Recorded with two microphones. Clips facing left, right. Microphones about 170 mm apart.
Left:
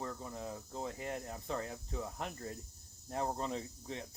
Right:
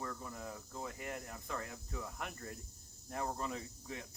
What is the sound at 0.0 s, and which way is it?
Speech, 25° left (ahead or behind).